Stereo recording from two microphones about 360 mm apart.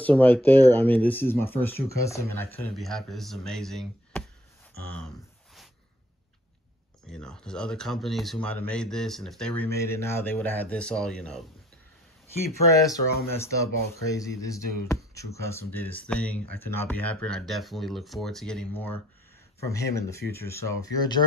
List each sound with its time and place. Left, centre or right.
0.0 s speech: centre
4.8 s a sound: centre
7.1 s speech: centre
12.7 s speech: centre
19.7 s speech: centre